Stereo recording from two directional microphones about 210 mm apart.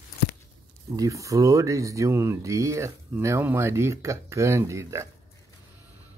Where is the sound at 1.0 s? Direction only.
15° right (ahead or behind).